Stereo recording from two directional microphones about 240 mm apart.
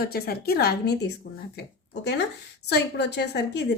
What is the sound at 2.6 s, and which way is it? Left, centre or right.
Speech, left.